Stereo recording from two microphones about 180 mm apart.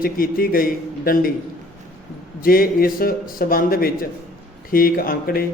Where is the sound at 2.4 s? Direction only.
55° left (ahead or behind).